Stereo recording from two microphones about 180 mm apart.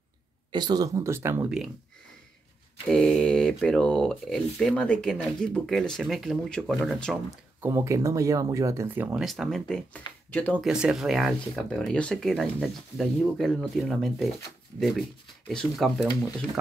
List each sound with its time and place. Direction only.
0.5 s speech: 25° right (ahead or behind)
2.9 s speech: 5° left (ahead or behind)
7.6 s speech: 15° right (ahead or behind); by 10.7 s 10° left (ahead or behind)
10.7 s speech: 5° right (ahead or behind)